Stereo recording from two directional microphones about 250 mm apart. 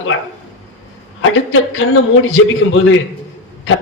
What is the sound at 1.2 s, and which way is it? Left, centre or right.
A man's voice, left.